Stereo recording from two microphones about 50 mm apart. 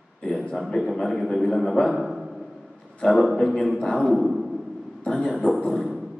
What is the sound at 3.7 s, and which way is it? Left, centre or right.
Speech, centre.